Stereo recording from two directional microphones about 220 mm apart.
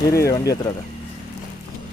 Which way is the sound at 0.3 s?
15° left (ahead or behind).